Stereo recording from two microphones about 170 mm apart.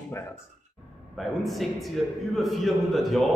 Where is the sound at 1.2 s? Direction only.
Centre (ahead or behind).